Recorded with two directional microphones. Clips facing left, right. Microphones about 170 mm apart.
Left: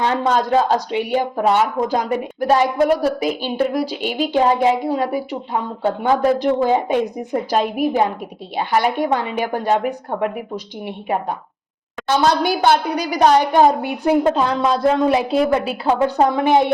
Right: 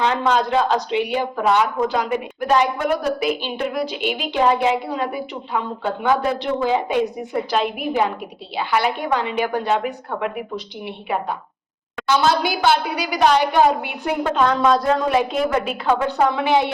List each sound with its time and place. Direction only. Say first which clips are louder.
0.0 s speech: left 1 dB; 40° left (ahead or behind)
12.6 s speech: left 2 dB; 50° left (ahead or behind)